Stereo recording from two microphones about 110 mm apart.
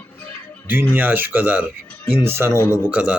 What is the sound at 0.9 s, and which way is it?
A man's voice, 15° right (ahead or behind).